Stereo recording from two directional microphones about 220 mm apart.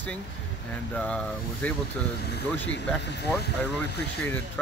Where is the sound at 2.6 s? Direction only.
50° left (ahead or behind).